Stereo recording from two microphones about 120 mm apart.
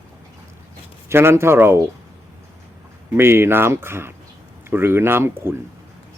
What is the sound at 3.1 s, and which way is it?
Speech, 20° right (ahead or behind).